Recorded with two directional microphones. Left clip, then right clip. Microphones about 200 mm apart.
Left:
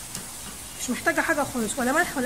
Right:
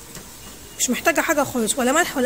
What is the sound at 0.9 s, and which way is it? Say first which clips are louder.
Speech: right 4 dB; 25° right (ahead or behind).